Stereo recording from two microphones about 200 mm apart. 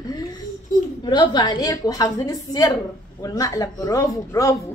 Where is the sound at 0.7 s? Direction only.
40° left (ahead or behind).